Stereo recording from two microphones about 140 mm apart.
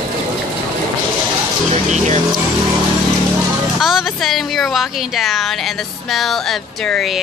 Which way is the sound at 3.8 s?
Centre (ahead or behind).